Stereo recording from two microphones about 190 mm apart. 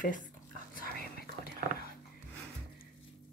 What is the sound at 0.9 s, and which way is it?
Whispering, 55° left (ahead or behind).